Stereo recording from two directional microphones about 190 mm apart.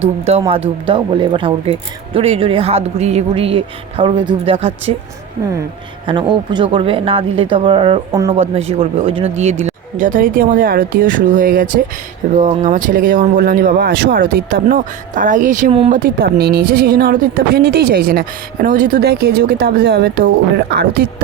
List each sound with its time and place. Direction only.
0.0 s speech: 35° right (ahead or behind)
6.1 s speech: 25° right (ahead or behind)
8.1 s speech: 15° right (ahead or behind)
8.4 s speech: 35° right (ahead or behind); by 20.3 s 60° right (ahead or behind)